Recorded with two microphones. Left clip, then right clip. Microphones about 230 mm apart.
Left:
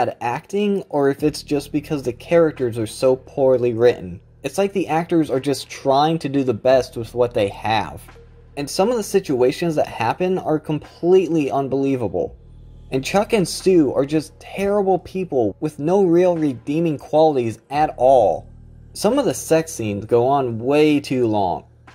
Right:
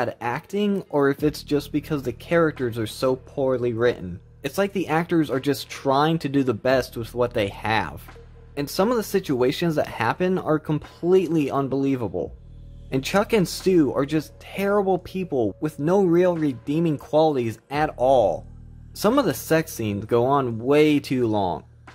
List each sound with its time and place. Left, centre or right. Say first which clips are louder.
0.0 s speech: left 5 dB; centre